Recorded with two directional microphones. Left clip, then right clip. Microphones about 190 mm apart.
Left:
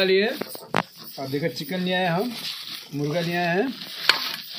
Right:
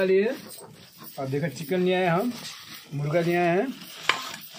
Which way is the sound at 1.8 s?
40° right (ahead or behind).